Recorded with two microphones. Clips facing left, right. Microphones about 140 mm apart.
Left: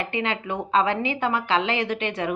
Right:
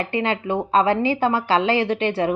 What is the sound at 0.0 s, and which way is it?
A woman's voice, 30° right (ahead or behind).